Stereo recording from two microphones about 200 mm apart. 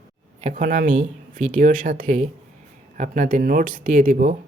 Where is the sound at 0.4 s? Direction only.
40° right (ahead or behind).